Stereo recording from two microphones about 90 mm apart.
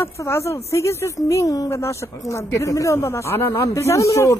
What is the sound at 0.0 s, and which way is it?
Speech, 30° left (ahead or behind).